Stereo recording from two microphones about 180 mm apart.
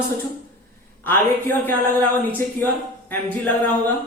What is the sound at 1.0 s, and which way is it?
Speech, 10° left (ahead or behind).